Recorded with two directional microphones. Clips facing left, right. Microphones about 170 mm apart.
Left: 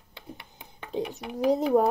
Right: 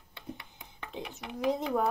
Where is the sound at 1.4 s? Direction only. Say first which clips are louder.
Left 7 dB; 40° left (ahead or behind).